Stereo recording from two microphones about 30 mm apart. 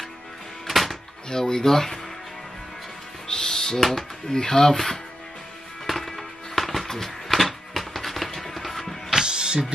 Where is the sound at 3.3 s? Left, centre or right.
Centre.